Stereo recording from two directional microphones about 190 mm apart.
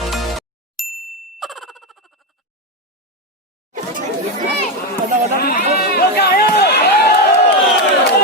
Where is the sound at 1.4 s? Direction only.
Centre (ahead or behind).